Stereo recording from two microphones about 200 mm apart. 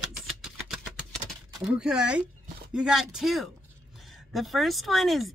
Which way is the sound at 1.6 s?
5° right (ahead or behind).